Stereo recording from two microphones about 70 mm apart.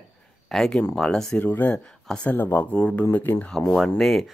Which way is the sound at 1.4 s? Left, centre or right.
Left.